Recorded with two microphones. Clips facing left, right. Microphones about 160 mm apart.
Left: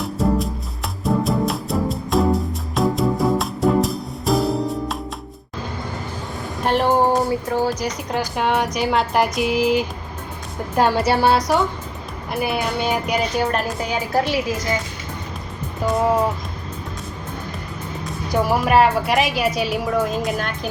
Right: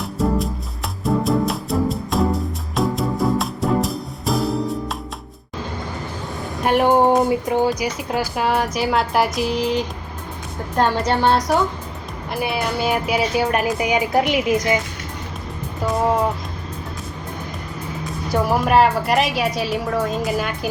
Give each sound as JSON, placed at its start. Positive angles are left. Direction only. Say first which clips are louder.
{"t": 0.0, "sound": "music", "louder": "left 1 dB", "side_deg": 0}
{"t": 6.7, "sound": "a woman's voice", "louder": "right 2 dB", "side_deg": -10}
{"t": 7.9, "sound": "a woman's voice", "louder": "right 1 dB", "side_deg": -5}
{"t": 18.3, "sound": "speech", "louder": "even", "side_deg": 0}